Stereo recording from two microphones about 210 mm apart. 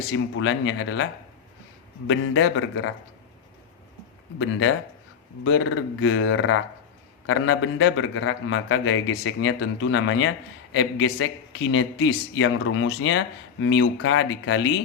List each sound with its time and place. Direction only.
0.1 s speech: 65° left (ahead or behind)
2.0 s a man's voice: 70° left (ahead or behind)
5.5 s a man's voice: 65° left (ahead or behind)